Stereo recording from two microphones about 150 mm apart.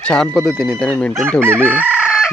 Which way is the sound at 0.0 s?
5° left (ahead or behind).